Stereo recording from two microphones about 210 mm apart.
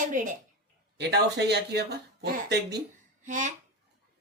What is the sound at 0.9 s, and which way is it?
Speech, 55° right (ahead or behind).